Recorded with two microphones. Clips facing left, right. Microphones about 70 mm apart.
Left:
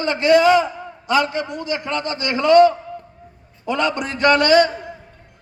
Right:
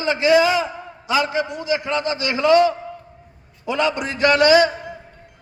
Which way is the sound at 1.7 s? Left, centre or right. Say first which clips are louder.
Right 3 dB; centre.